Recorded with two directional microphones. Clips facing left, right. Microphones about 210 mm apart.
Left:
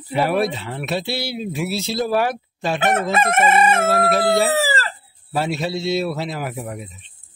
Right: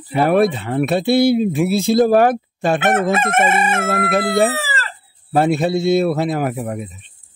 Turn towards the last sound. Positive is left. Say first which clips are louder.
# right 7 dB
turn(degrees=-50)  # may be behind; listen again after turning